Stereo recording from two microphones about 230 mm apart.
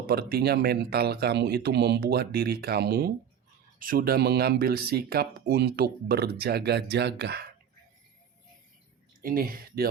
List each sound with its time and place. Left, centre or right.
0.1 s speech: right
9.2 s speech: right